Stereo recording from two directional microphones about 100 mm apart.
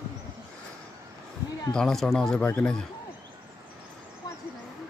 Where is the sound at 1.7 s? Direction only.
5° left (ahead or behind).